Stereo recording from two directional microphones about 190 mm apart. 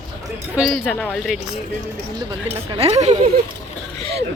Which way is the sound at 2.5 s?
30° right (ahead or behind).